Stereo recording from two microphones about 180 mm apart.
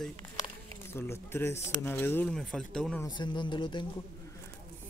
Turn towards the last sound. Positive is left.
turn(degrees=25)  # may be behind; listen again after turning